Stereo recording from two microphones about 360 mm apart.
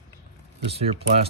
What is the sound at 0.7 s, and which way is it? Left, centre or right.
Speech, centre.